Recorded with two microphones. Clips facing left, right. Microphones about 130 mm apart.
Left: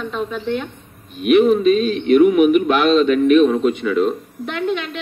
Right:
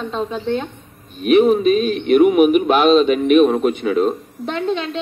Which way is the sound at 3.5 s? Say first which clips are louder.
Even; 50° right (ahead or behind).